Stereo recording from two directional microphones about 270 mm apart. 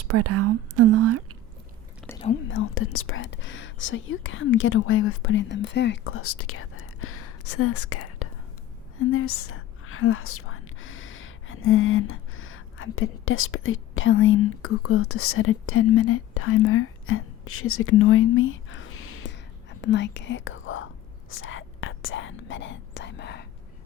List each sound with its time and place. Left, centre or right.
0.0 s speech: right
2.0 s whispering: centre
2.5 s speech: left
21.2 s whispering: left